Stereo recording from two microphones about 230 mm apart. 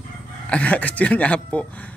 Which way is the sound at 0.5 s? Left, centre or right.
Centre.